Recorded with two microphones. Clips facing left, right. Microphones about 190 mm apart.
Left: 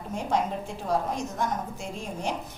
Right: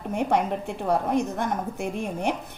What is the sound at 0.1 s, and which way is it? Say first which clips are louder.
A woman's voice: right 4 dB; 60° right (ahead or behind).